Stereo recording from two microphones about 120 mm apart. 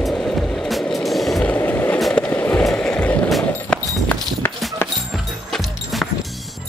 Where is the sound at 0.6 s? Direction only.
Centre (ahead or behind).